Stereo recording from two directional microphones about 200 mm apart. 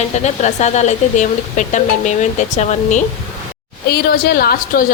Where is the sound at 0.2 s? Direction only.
35° left (ahead or behind).